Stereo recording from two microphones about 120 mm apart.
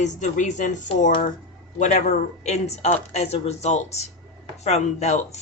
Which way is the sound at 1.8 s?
80° left.